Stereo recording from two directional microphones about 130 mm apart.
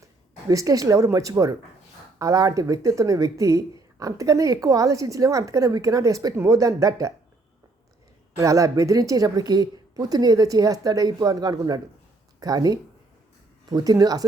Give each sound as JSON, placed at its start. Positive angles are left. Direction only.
{"t": 0.0, "sound": "speech", "side_deg": -25}
{"t": 8.4, "sound": "speech", "side_deg": -25}